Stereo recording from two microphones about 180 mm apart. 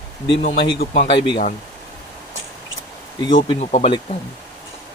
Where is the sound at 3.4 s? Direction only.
35° left (ahead or behind).